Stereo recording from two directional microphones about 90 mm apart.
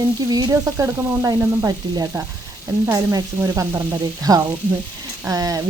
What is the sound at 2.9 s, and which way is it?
Speech, 35° right (ahead or behind).